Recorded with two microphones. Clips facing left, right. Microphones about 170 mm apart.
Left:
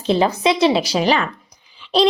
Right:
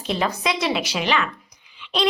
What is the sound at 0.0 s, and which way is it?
A woman's voice, 30° left (ahead or behind).